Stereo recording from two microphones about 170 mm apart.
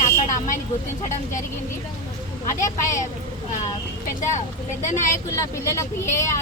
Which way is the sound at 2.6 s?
20° left (ahead or behind).